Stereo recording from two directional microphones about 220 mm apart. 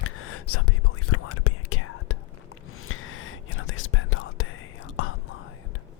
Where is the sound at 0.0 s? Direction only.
75° left (ahead or behind).